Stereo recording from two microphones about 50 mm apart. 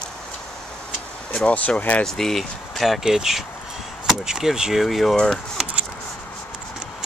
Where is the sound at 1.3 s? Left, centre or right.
Left.